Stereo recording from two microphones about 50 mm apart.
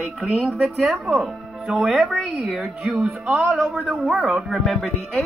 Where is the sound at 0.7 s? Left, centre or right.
Centre.